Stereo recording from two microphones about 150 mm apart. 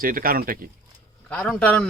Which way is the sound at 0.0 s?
70° right (ahead or behind).